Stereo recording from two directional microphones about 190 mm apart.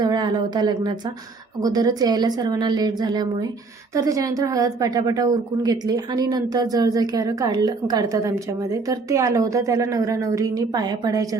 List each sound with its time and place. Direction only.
0.0 s a woman's voice: 25° right (ahead or behind)